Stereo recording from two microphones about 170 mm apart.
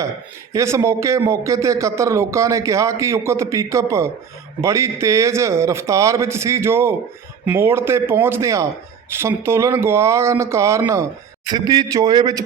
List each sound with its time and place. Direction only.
0.5 s a man's voice: 15° right (ahead or behind)